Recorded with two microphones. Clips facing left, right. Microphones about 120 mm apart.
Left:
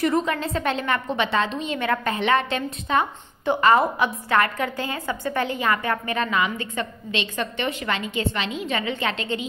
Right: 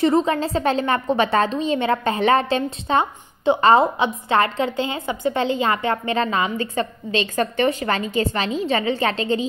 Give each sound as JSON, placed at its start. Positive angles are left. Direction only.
{"t": 0.0, "sound": "a woman's voice", "side_deg": -25}